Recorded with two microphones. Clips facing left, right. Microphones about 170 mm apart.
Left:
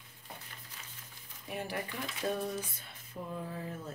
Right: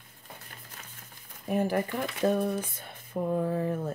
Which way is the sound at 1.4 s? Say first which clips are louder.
Right 11 dB; 45° right (ahead or behind).